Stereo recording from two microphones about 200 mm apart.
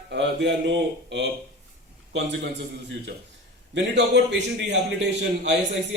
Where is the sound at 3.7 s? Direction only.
60° right (ahead or behind).